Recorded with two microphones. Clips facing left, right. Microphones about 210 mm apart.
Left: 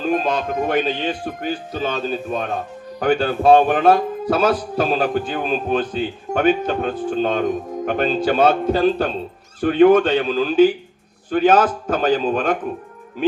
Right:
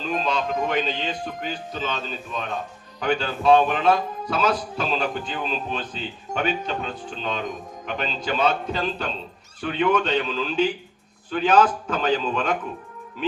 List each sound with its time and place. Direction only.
0.0 s speech: 50° left (ahead or behind)